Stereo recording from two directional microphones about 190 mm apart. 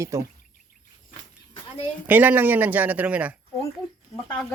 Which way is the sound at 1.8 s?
10° right (ahead or behind).